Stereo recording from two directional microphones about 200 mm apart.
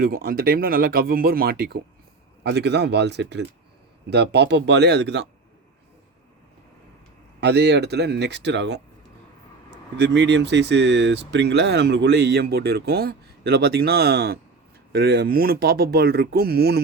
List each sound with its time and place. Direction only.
0.0 s speech: 50° right (ahead or behind)
7.4 s speech: 55° right (ahead or behind)
10.0 s speech: 60° right (ahead or behind)